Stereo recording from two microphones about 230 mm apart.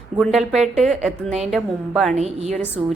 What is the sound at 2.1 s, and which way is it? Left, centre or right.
Speech, right.